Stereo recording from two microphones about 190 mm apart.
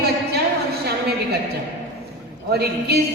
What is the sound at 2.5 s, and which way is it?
Speech, 55° right (ahead or behind).